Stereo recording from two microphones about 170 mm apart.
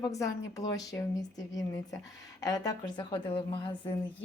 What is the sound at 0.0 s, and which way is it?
A woman's voice, 20° left (ahead or behind).